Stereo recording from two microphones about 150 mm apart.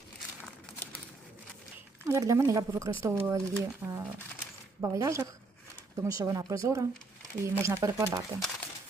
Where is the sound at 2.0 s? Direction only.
20° right (ahead or behind).